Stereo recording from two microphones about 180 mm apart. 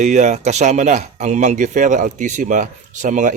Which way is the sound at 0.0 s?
40° right (ahead or behind).